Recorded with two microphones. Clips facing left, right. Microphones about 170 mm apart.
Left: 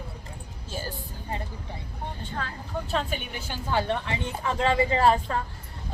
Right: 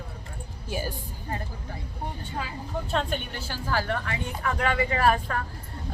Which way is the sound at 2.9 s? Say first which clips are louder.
Right 1 dB; 5° left (ahead or behind).